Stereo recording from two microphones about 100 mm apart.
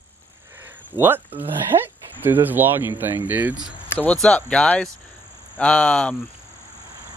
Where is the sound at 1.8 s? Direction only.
20° right (ahead or behind).